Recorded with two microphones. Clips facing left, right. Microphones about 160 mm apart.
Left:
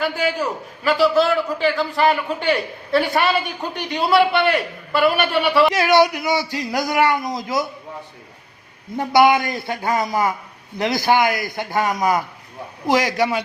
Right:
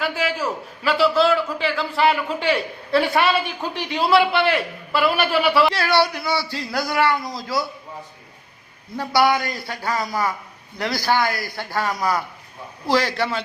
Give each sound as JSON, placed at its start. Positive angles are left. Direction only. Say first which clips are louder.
{"t": 0.0, "sound": "a man's voice", "louder": "left 2 dB", "side_deg": 0}
{"t": 5.7, "sound": "a man's voice", "louder": "left 4 dB", "side_deg": 15}
{"t": 9.0, "sound": "a man's voice", "louder": "left 4 dB", "side_deg": 20}